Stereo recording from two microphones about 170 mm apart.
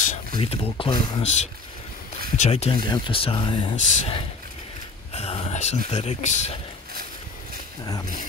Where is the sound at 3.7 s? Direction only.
45° left (ahead or behind).